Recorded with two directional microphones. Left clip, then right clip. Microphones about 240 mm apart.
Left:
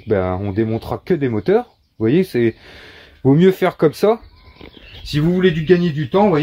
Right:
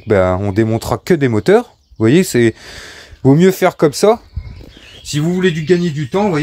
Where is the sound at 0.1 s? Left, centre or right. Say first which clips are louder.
Right 6 dB; right.